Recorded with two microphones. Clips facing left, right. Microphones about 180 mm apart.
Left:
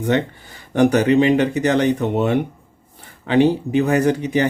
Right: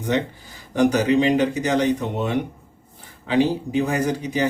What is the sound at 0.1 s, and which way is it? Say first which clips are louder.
Speech: left 2 dB; 60° left (ahead or behind).